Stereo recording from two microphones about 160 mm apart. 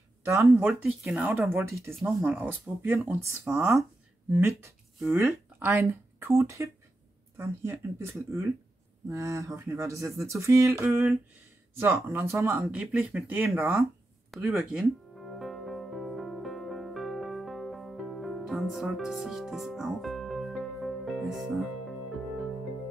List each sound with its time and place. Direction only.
0.2 s speech: 15° right (ahead or behind)
14.4 s music: 15° right (ahead or behind); by 22.5 s 5° left (ahead or behind)